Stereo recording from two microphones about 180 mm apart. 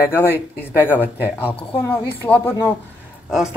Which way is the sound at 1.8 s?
10° left (ahead or behind).